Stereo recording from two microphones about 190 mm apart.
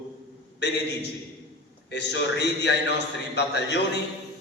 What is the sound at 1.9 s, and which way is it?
A man's voice, 65° left (ahead or behind).